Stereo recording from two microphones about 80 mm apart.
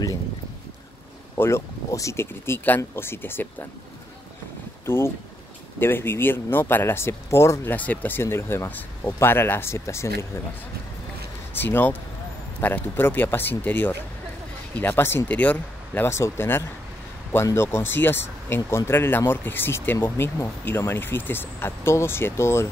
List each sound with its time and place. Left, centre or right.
1.3 s speech: left
4.8 s speech: left
7.7 s speech: left
11.5 s speech: left